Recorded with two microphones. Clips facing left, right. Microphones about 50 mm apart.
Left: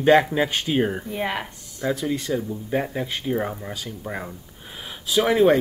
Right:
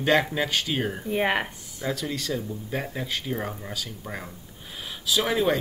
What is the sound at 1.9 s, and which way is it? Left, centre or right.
Speech, left.